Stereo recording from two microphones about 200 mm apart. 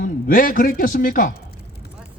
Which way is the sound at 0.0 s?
45° left (ahead or behind).